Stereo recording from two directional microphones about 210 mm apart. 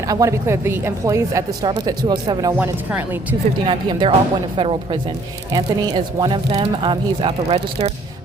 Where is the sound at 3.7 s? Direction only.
20° right (ahead or behind).